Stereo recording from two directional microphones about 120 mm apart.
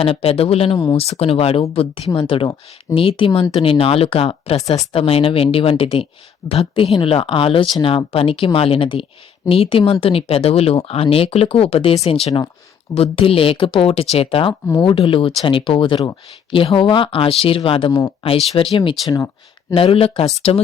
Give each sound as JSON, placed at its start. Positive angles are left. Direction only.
{"t": 0.0, "sound": "speech", "side_deg": 55}